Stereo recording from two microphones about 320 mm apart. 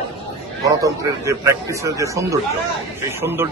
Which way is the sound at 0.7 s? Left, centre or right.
Centre.